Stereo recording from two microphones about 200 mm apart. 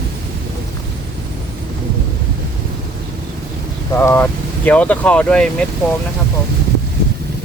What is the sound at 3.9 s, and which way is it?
Speech, 10° left (ahead or behind).